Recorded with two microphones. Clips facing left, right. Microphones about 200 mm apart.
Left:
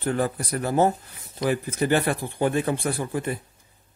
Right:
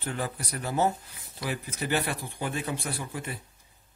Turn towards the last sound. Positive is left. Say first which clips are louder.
# left 9 dB
turn(degrees=55)  # may be behind; listen again after turning